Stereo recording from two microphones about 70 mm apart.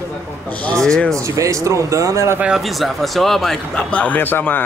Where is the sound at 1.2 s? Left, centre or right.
Right.